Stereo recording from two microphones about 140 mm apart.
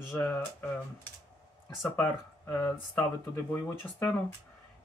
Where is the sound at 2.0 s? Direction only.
15° left (ahead or behind).